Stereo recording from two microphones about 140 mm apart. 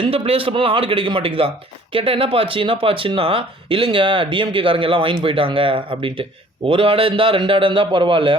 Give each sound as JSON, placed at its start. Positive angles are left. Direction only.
{"t": 0.0, "sound": "speech", "side_deg": -40}